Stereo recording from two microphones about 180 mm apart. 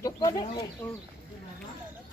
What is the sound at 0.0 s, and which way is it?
Speech, 20° left (ahead or behind).